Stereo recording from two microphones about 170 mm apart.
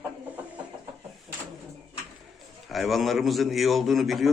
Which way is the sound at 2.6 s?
Centre (ahead or behind).